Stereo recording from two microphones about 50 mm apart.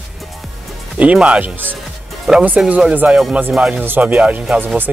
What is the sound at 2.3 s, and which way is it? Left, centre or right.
Speech, centre.